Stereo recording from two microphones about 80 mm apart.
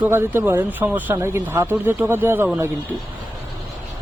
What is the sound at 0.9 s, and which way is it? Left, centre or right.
Speech, right.